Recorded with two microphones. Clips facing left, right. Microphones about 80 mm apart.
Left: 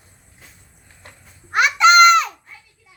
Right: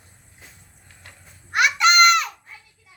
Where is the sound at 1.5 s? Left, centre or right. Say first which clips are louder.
Left 5 dB; left.